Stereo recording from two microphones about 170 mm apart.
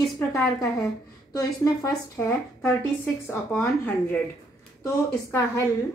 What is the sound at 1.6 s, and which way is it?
Speech, 15° left (ahead or behind).